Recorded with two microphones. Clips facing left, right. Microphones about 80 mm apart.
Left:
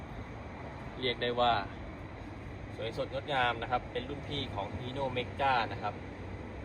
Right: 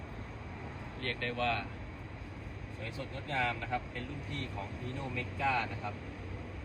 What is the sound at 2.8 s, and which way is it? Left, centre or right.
Speech, left.